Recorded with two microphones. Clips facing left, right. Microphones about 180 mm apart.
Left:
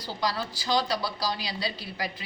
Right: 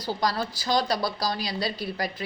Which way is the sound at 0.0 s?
45° right (ahead or behind).